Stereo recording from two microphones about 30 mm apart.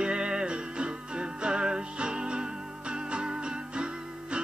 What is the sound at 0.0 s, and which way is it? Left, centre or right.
Music, right.